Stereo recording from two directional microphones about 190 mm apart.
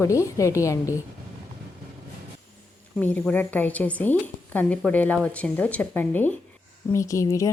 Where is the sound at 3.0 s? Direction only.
10° left (ahead or behind).